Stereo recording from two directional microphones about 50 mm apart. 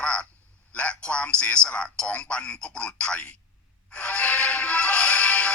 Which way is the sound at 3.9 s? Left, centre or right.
Left.